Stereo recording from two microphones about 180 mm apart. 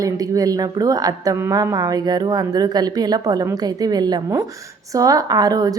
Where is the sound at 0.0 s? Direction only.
20° right (ahead or behind).